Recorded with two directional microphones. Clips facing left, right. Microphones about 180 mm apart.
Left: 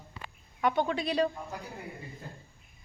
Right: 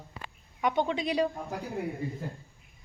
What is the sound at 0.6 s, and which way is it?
Speech, 15° right (ahead or behind).